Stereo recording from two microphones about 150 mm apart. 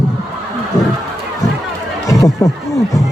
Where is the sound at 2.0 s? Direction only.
20° left (ahead or behind).